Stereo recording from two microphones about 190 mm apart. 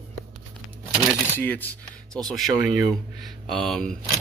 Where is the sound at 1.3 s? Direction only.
10° left (ahead or behind).